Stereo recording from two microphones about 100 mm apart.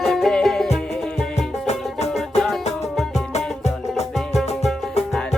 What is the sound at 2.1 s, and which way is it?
Music, centre (ahead or behind).